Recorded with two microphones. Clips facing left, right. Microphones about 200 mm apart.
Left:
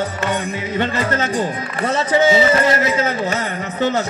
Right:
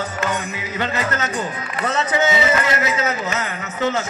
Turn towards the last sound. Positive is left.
turn(degrees=30)  # may be behind; listen again after turning